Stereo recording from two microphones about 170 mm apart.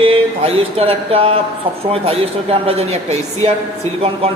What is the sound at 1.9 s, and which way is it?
A man's voice, 35° right (ahead or behind).